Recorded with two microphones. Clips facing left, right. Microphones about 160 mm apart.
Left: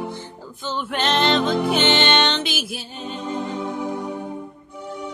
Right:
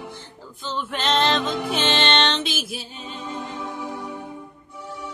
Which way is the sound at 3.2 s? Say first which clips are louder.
Left 5 dB; 50° left (ahead or behind).